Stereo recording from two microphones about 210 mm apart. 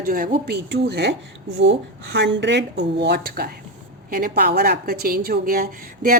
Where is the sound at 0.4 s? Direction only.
50° right (ahead or behind).